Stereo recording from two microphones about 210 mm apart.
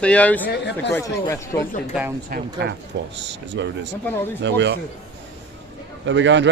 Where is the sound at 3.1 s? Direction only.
60° right (ahead or behind).